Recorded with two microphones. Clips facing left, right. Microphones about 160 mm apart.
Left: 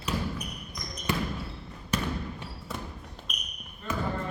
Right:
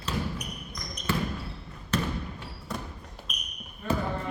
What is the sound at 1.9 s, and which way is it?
Basketball bounce, 10° left (ahead or behind).